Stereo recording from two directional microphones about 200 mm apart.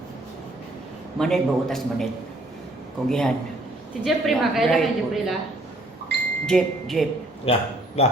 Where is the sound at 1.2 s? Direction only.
Centre (ahead or behind).